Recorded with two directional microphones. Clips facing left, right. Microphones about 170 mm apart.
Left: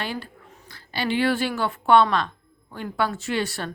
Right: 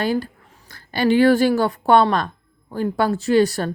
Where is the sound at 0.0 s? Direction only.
40° right (ahead or behind).